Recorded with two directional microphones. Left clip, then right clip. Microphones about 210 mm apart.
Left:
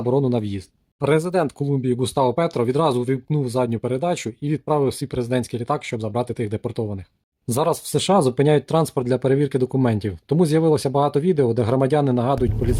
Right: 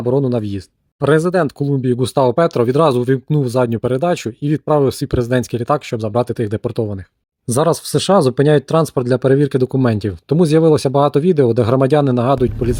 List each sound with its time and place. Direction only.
0.0 s speech: 20° right (ahead or behind)